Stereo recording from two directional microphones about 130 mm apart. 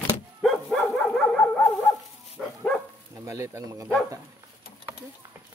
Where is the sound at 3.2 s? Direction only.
20° right (ahead or behind).